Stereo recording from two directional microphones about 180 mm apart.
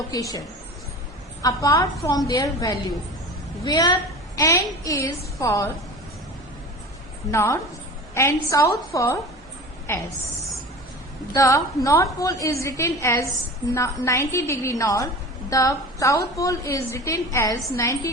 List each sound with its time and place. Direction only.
0.1 s a woman's voice: 20° left (ahead or behind)
7.3 s a woman's voice: 15° left (ahead or behind)
11.3 s a woman's voice: 20° left (ahead or behind)